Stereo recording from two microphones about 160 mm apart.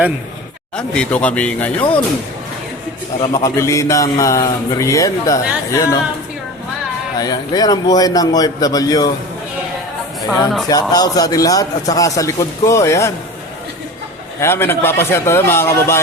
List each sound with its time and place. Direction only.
0.8 s speech: 5° left (ahead or behind)
3.3 s a man's voice: 20° left (ahead or behind)
7.2 s a man's voice: 25° left (ahead or behind)
10.7 s a man's voice: 25° left (ahead or behind)
14.4 s speech: 15° left (ahead or behind)